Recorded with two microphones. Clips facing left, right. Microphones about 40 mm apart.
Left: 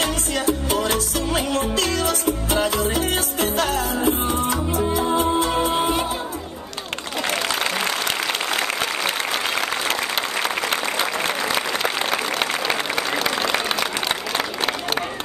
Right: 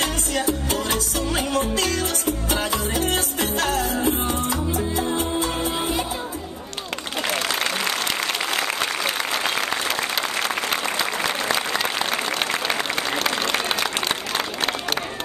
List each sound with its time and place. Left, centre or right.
0.5 s music: centre
4.5 s music: left
5.0 s music: centre
13.2 s applause: centre